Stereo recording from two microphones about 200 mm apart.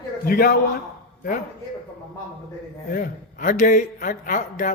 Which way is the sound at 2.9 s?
45° left (ahead or behind).